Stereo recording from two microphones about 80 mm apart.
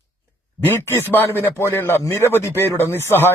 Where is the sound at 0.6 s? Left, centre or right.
Left.